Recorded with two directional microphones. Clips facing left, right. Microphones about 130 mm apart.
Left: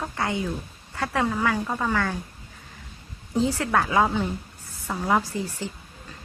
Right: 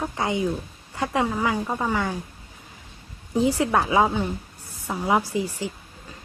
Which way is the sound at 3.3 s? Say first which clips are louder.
Right 2 dB; 15° right (ahead or behind).